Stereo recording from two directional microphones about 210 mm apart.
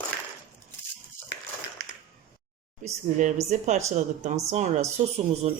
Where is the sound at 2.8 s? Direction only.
35° right (ahead or behind).